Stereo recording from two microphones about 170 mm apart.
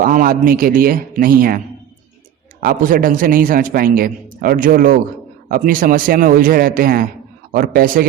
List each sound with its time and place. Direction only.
0.0 s a man's voice: 55° right (ahead or behind)